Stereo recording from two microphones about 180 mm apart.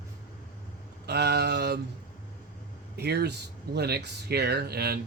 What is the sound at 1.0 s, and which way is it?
Speech, 65° right (ahead or behind).